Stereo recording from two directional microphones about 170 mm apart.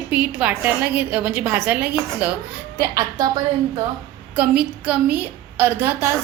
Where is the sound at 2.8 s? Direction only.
20° right (ahead or behind).